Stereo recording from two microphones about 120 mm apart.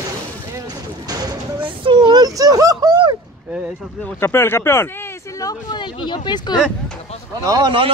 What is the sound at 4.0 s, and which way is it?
Speech, 20° left (ahead or behind).